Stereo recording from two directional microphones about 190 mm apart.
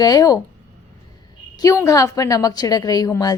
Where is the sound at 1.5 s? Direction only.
15° left (ahead or behind).